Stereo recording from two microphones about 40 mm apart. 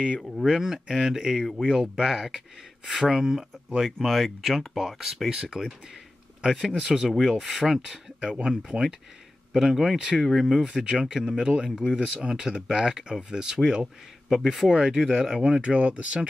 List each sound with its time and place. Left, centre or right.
0.4 s speech: centre
5.3 s speech: centre
6.8 s speech: centre; by 16.2 s right